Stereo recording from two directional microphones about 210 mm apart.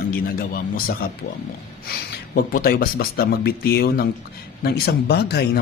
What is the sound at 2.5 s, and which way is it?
Speech, 45° left (ahead or behind).